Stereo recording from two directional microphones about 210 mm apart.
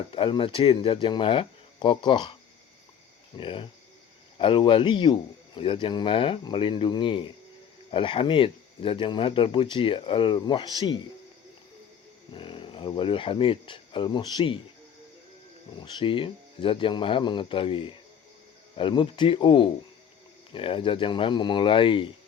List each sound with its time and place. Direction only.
0.1 s speech: 25° left (ahead or behind)
3.3 s speech: 25° left (ahead or behind)
12.3 s speech: 25° left (ahead or behind)
15.8 s speech: 25° left (ahead or behind)